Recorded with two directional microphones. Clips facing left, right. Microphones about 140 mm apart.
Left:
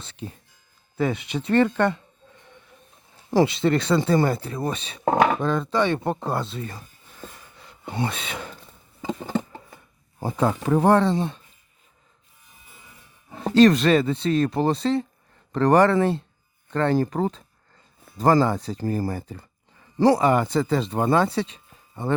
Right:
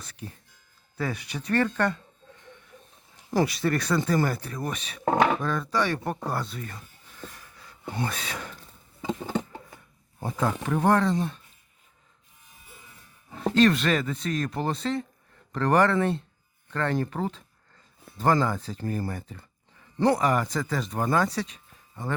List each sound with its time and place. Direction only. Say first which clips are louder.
0.0 s speech: left 5 dB; 25° left (ahead or behind)
3.3 s speech: left 5 dB; 25° left (ahead or behind)
9.0 s a sound: left 2 dB; 10° left (ahead or behind)
10.2 s speech: left 5 dB; 30° left (ahead or behind)
13.5 s speech: left 6 dB; 35° left (ahead or behind)